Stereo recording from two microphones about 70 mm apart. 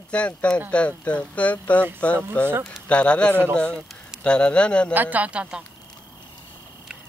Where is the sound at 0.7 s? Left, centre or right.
Centre.